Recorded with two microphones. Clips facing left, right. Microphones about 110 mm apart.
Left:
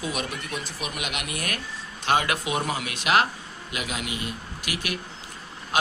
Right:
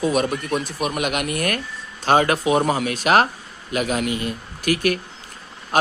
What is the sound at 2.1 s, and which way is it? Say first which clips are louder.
Speech: right 7 dB; 40° right (ahead or behind).